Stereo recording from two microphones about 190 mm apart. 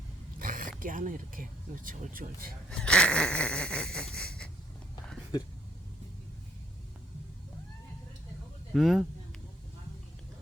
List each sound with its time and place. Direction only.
0.3 s speech: 45° right (ahead or behind)
2.6 s wheeze: 5° left (ahead or behind)
8.7 s speech: centre (ahead or behind)